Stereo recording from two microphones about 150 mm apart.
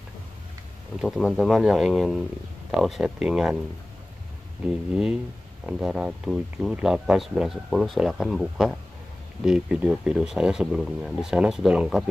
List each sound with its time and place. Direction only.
1.0 s speech: centre (ahead or behind)
4.9 s speech: 5° right (ahead or behind)